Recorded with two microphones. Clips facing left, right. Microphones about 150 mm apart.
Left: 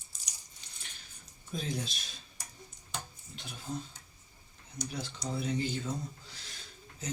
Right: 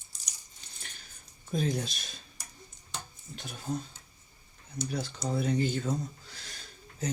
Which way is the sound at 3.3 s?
50° right (ahead or behind).